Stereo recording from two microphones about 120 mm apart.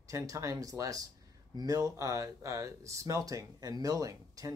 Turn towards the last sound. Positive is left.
turn(degrees=-30)  # may be behind; listen again after turning